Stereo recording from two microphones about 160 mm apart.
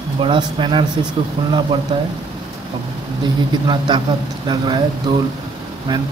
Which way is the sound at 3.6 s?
30° right (ahead or behind).